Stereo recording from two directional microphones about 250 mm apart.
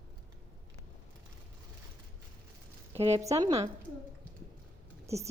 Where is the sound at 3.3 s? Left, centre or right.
Centre.